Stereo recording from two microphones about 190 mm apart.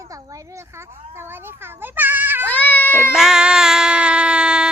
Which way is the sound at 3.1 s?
5° right (ahead or behind).